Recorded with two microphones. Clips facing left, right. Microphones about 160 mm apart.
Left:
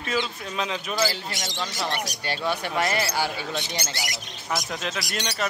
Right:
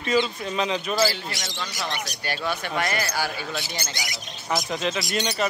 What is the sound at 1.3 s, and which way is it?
Speech, 20° left (ahead or behind).